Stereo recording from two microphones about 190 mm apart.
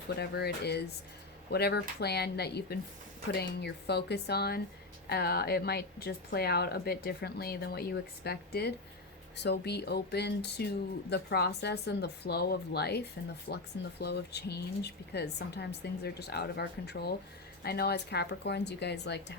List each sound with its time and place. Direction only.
0.2 s a woman's voice: 60° left (ahead or behind)